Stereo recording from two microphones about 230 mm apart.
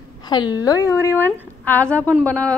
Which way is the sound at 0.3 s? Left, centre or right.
Centre.